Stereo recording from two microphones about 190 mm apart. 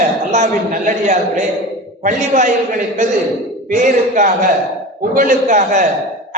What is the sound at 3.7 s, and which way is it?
A man's voice, 40° right (ahead or behind).